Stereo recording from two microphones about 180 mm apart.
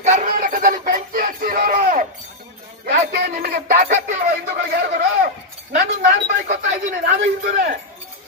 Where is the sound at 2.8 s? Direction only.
60° right (ahead or behind).